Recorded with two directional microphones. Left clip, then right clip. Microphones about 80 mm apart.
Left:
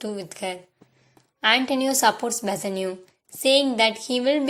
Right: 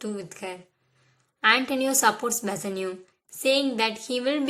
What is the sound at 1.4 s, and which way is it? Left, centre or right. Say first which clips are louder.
Speech: left 1 dB; left.